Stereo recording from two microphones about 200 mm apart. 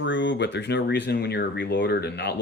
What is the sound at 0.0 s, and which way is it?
A man's voice, 65° left (ahead or behind).